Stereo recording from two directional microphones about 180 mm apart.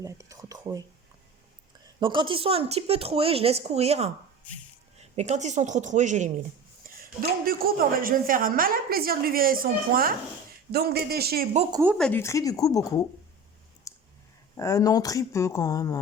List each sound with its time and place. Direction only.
0.0 s speech: 20° right (ahead or behind)
2.0 s speech: 25° right (ahead or behind); by 6.3 s 40° right (ahead or behind)
6.8 s a sound: 50° right (ahead or behind)
7.2 s a woman's voice: 55° right (ahead or behind)
11.7 s speech: 10° right (ahead or behind)
11.9 s speech: 5° left (ahead or behind)
12.2 s speech: 20° left (ahead or behind)
13.9 s clicking: 20° left (ahead or behind)
14.5 s speech: 20° left (ahead or behind)